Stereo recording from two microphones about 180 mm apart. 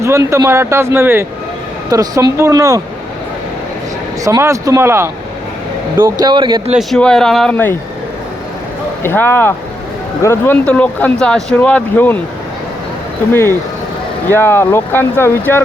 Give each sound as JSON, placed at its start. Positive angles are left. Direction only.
{"t": 0.0, "sound": "speech", "side_deg": -15}
{"t": 4.2, "sound": "speech", "side_deg": -15}
{"t": 6.7, "sound": "speech", "side_deg": 0}
{"t": 9.0, "sound": "speech", "side_deg": 10}
{"t": 14.3, "sound": "speech", "side_deg": 15}